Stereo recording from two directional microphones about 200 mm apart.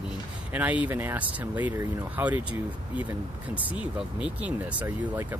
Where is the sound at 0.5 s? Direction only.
5° right (ahead or behind).